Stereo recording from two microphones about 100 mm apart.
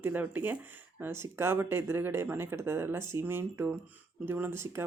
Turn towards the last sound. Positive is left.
turn(degrees=-25)  # may be behind; listen again after turning